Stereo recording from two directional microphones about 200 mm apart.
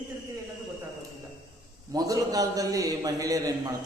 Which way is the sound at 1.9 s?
20° right (ahead or behind).